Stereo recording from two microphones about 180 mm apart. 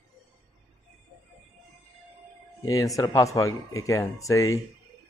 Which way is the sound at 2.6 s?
20° left (ahead or behind).